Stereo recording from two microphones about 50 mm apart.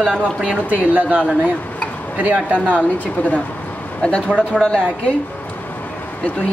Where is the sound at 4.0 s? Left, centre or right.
Left.